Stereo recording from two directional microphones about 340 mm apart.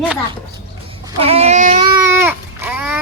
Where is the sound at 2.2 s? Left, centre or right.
Centre.